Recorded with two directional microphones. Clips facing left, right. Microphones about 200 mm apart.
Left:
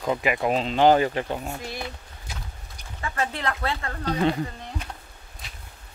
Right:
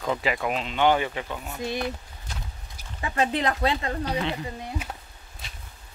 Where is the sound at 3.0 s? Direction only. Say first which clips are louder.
Right 4 dB; 20° right (ahead or behind).